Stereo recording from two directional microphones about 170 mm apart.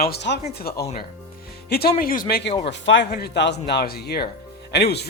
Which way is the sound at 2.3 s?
75° left (ahead or behind).